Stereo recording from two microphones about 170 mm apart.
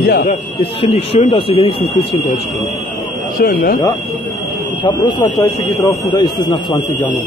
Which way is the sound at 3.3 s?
60° left (ahead or behind).